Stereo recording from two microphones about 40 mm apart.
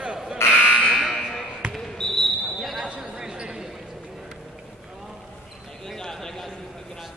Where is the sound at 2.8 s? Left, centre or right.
Right.